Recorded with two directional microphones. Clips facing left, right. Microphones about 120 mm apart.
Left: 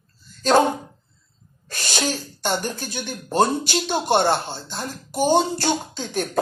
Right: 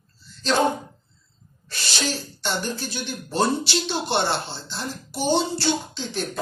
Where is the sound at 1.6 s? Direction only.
50° left (ahead or behind).